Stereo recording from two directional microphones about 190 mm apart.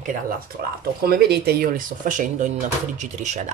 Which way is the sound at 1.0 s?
55° right (ahead or behind).